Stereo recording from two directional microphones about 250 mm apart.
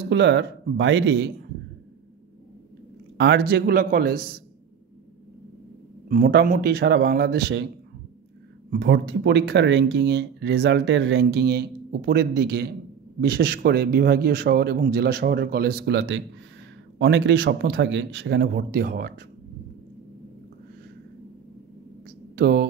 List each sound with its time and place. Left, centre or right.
0.1 s speech: right
3.2 s speech: right
6.0 s speech: right
8.7 s speech: right
22.4 s speech: right